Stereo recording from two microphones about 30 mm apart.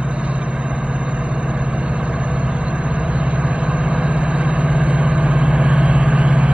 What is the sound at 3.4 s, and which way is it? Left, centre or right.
Vehicle, right.